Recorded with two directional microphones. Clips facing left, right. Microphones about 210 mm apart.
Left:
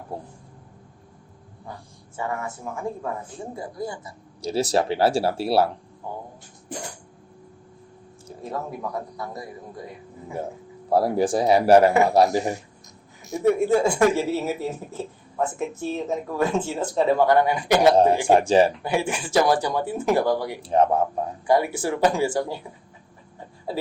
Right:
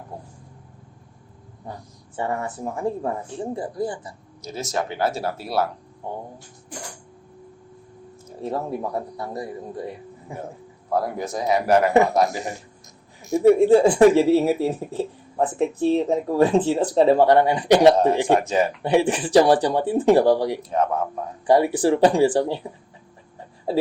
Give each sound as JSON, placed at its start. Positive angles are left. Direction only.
{"t": 2.1, "sound": "speech", "side_deg": -30}
{"t": 4.4, "sound": "speech", "side_deg": 30}
{"t": 8.4, "sound": "speech", "side_deg": -30}
{"t": 10.8, "sound": "speech", "side_deg": 30}
{"t": 13.4, "sound": "speech", "side_deg": -30}
{"t": 17.9, "sound": "speech", "side_deg": 30}
{"t": 18.8, "sound": "speech", "side_deg": -35}
{"t": 20.6, "sound": "speech", "side_deg": 30}
{"t": 21.4, "sound": "speech", "side_deg": -35}